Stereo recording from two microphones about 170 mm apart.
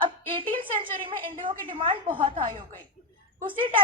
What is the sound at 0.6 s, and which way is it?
A woman's voice, 30° right (ahead or behind).